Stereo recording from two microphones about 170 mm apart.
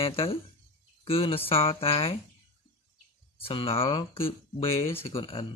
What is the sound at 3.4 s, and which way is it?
Speech, 35° left (ahead or behind).